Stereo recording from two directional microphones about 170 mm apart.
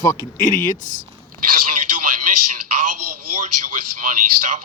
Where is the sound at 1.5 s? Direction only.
55° right (ahead or behind).